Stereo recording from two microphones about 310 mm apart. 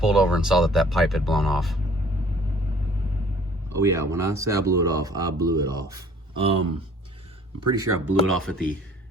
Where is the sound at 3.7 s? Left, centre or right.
Centre.